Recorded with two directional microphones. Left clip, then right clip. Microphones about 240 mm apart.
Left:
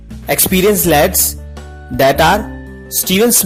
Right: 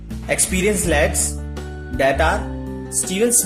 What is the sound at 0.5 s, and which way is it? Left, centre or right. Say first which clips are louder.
Speech: left 11 dB; left.